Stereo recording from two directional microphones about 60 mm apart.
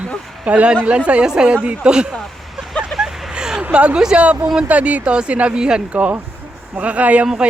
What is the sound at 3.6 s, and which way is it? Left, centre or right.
A woman's voice, right.